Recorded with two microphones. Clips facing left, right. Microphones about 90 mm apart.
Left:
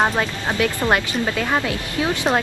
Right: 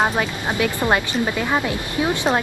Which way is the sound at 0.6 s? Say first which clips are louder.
Even; 15° right (ahead or behind).